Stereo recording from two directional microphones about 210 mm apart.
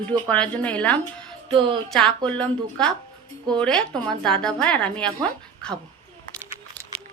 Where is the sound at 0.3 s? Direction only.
5° left (ahead or behind).